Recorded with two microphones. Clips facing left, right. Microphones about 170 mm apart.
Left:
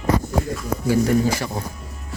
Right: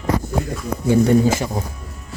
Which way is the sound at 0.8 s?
20° right (ahead or behind).